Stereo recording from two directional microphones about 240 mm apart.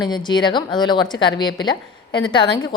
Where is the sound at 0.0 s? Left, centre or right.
Centre.